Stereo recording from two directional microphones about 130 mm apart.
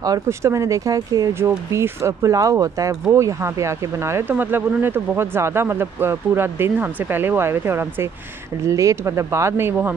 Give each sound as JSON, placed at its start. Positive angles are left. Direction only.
{"t": 0.0, "sound": "speech", "side_deg": -25}